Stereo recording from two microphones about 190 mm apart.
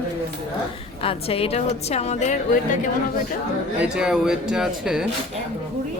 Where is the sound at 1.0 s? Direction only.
30° left (ahead or behind).